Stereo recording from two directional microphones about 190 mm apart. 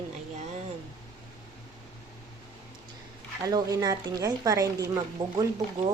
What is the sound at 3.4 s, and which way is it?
Speech, 20° right (ahead or behind).